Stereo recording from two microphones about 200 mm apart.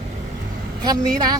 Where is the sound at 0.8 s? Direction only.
20° right (ahead or behind).